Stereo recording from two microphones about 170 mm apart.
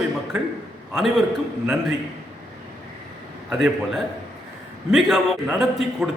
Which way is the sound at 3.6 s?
Centre (ahead or behind).